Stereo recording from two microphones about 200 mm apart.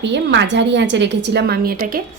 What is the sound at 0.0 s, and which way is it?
A woman's voice, 60° right (ahead or behind).